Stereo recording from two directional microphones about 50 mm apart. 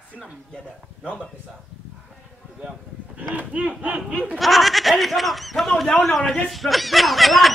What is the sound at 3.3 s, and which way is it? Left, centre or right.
Speech, right.